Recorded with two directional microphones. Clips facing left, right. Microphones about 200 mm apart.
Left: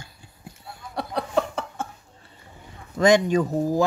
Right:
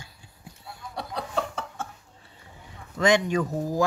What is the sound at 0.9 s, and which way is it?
Chuckle, 60° left (ahead or behind).